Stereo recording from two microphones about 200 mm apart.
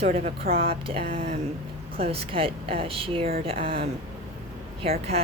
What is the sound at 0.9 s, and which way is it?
Speech, 30° right (ahead or behind).